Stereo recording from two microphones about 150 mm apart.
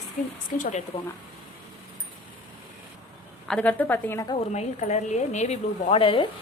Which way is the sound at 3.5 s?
10° left (ahead or behind).